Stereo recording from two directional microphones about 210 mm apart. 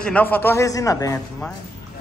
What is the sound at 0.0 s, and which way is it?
A man's voice, 5° left (ahead or behind).